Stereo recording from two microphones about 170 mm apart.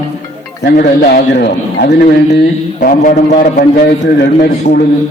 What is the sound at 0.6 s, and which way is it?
A man's voice, 65° left (ahead or behind).